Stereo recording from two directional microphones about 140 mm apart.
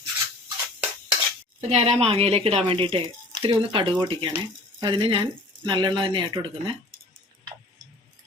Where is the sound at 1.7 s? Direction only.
45° right (ahead or behind).